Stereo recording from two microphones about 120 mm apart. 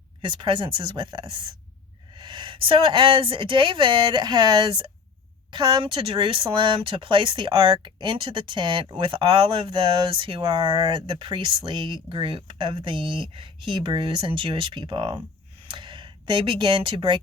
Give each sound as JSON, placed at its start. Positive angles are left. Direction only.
{"t": 0.2, "sound": "speech", "side_deg": -40}